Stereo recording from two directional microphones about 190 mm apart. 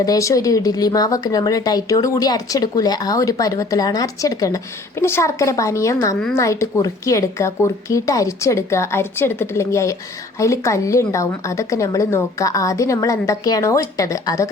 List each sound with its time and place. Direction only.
0.0 s speech: 15° left (ahead or behind)